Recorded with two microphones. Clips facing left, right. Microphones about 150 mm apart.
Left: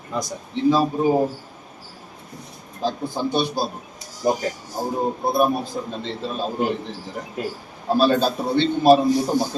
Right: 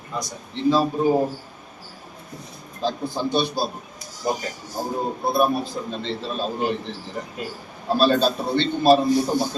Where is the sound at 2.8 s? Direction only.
15° left (ahead or behind).